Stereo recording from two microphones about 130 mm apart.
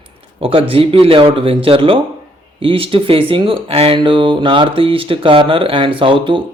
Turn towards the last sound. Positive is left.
turn(degrees=-40)  # may be behind; listen again after turning